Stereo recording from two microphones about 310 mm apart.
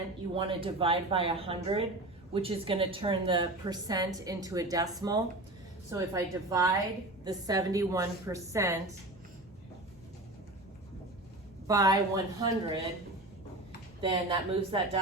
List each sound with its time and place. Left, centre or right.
0.3 s a woman's voice: centre
11.7 s a woman's voice: centre
14.0 s a woman's voice: centre